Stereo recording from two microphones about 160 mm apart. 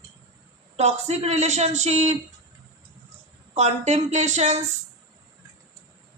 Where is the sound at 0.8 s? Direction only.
40° right (ahead or behind).